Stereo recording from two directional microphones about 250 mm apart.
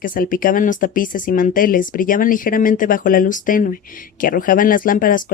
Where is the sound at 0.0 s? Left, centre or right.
Left.